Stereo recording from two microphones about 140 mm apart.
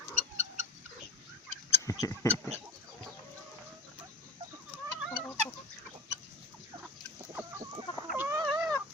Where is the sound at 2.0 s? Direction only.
20° left (ahead or behind).